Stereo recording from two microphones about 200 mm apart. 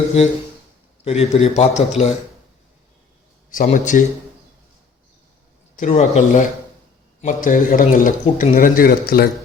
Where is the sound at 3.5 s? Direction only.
40° left (ahead or behind).